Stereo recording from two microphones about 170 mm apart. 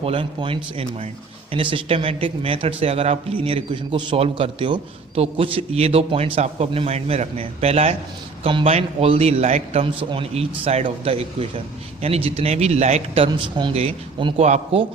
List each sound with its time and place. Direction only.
0.0 s speech: 30° right (ahead or behind)